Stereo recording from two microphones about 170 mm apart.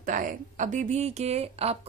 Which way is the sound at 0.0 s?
50° right (ahead or behind).